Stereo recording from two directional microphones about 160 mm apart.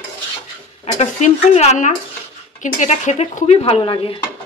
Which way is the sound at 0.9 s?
45° left (ahead or behind).